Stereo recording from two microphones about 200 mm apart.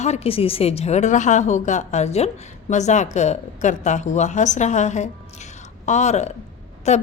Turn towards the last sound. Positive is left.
turn(degrees=35)  # may be behind; listen again after turning